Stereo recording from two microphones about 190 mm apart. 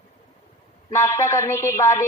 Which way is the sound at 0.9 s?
15° left (ahead or behind).